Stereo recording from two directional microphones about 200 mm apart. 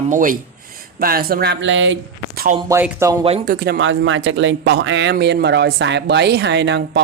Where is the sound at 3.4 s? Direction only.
50° right (ahead or behind).